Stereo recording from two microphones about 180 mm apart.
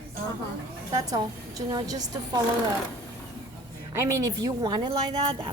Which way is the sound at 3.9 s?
15° right (ahead or behind).